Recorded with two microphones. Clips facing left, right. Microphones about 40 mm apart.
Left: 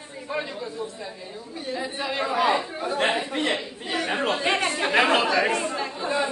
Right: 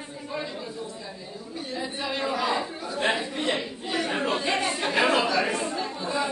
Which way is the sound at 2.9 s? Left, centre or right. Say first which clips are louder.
Left 2 dB; left.